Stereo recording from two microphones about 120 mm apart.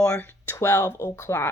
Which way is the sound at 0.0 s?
10° left (ahead or behind).